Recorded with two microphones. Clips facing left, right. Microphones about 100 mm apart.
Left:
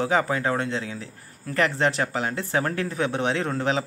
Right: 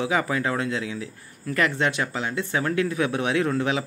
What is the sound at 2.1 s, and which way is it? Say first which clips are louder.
Speech: left 1 dB; 45° left (ahead or behind).